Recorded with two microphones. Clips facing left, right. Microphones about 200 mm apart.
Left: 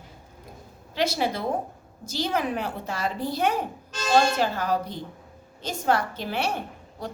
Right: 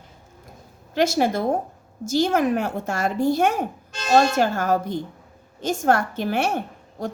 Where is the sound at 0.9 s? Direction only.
45° right (ahead or behind).